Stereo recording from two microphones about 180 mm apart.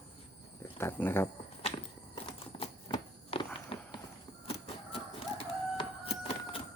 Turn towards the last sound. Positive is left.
turn(degrees=30)  # may be behind; listen again after turning